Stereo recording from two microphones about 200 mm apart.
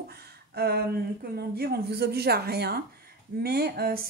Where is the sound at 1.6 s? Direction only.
55° right (ahead or behind).